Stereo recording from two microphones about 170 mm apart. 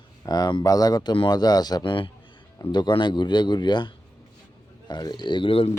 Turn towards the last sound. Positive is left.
turn(degrees=30)  # may be behind; listen again after turning